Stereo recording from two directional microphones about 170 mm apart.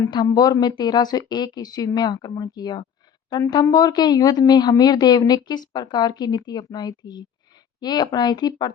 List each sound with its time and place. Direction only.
0.0 s speech: 25° left (ahead or behind)